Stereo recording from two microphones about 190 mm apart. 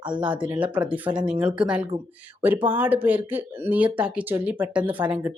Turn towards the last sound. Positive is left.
turn(degrees=-10)  # may be behind; listen again after turning